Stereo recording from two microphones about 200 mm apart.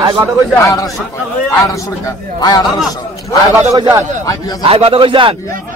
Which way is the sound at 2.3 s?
20° left (ahead or behind).